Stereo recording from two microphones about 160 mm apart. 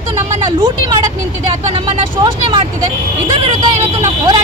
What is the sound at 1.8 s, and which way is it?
Speech, 30° right (ahead or behind).